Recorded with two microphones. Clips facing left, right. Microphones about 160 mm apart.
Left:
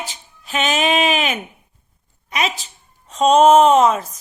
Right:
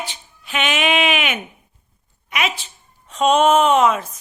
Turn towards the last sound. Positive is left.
turn(degrees=40)  # may be behind; listen again after turning